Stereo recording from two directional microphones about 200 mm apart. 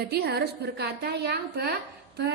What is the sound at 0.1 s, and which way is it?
A woman's voice, 55° right (ahead or behind).